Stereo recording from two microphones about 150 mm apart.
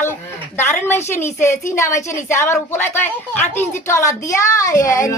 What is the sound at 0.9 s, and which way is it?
A woman's voice, 15° left (ahead or behind).